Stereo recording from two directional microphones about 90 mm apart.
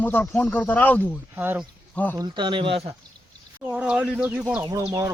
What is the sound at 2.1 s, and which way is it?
Speech, 60° right (ahead or behind).